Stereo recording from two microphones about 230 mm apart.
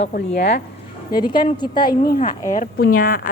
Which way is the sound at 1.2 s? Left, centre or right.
Centre.